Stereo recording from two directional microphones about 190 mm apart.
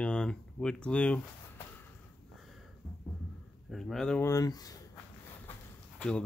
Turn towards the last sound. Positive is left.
turn(degrees=5)  # may be behind; listen again after turning